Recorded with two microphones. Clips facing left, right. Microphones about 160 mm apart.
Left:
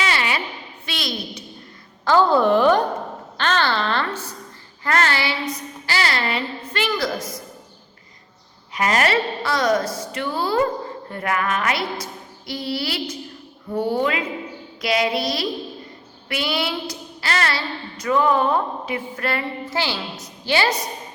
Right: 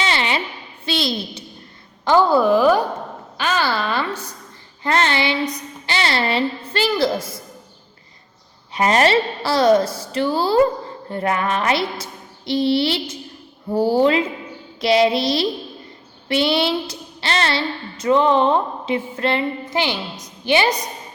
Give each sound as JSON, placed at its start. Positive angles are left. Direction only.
{"t": 0.0, "sound": "a sound", "side_deg": -25}
{"t": 0.9, "sound": "a woman's voice", "side_deg": -30}
{"t": 2.0, "sound": "a woman's voice", "side_deg": -15}
{"t": 2.4, "sound": "a woman's voice", "side_deg": -5}
{"t": 8.7, "sound": "a woman's voice", "side_deg": -30}